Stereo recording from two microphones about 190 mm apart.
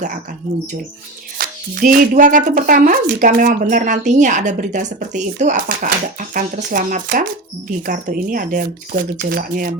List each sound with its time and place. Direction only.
1.4 s speech: 50° right (ahead or behind)